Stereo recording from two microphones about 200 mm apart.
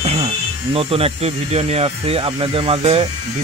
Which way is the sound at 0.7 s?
30° right (ahead or behind).